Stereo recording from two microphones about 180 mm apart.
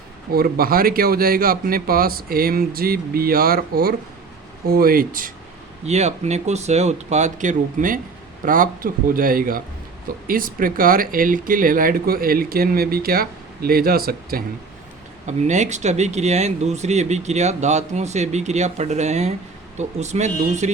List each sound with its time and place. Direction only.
0.3 s speech: 55° right (ahead or behind)
5.8 s speech: 40° right (ahead or behind); by 14.4 s 55° right (ahead or behind)
15.3 s speech: 40° right (ahead or behind)